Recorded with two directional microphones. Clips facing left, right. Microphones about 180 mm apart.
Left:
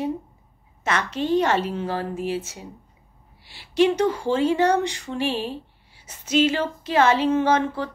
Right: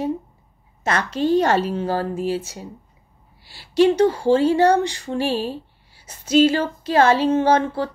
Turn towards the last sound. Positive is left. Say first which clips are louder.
# right 3 dB
turn(degrees=-35)  # may be behind; listen again after turning